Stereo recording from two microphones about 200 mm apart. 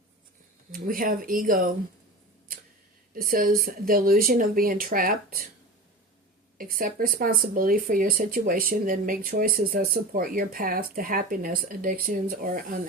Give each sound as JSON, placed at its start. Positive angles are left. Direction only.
{"t": 0.7, "sound": "speech", "side_deg": -45}
{"t": 3.2, "sound": "speech", "side_deg": -45}
{"t": 6.6, "sound": "speech", "side_deg": -45}